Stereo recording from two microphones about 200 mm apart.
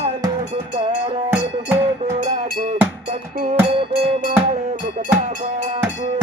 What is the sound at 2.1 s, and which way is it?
Cowbell, 35° right (ahead or behind).